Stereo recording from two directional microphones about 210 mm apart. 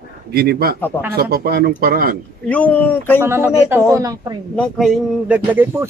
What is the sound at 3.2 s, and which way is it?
Speech, 10° right (ahead or behind).